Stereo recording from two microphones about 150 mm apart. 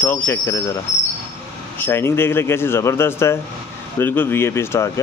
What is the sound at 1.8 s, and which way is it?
Speech, 15° left (ahead or behind).